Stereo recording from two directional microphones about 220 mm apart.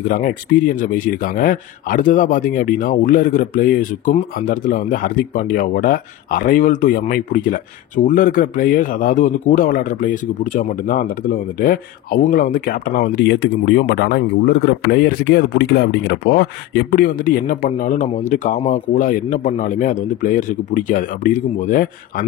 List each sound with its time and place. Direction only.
0.1 s a man's voice: 40° left (ahead or behind)